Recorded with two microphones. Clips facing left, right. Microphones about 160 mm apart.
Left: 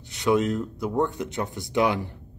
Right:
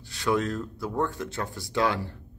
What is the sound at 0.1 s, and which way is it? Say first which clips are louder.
Speech: left 4 dB; 20° left (ahead or behind).